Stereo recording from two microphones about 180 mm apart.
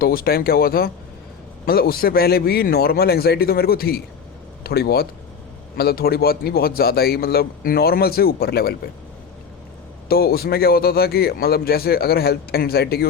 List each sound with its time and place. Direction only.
0.0 s speech: 55° left (ahead or behind)
10.1 s speech: 60° left (ahead or behind)